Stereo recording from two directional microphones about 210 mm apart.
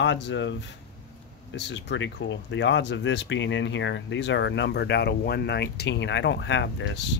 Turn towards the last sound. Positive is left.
turn(degrees=55)  # may be behind; listen again after turning